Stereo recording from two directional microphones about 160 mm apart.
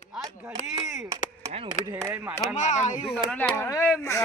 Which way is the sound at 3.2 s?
10° left (ahead or behind).